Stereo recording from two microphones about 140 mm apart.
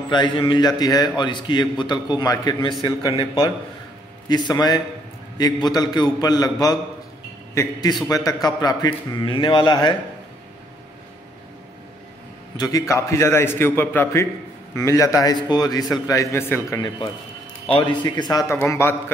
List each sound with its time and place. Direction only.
0.1 s a man's voice: 35° left (ahead or behind)
4.3 s a man's voice: 30° left (ahead or behind)
12.5 s a man's voice: 25° left (ahead or behind)
17.8 s a man's voice: 30° left (ahead or behind)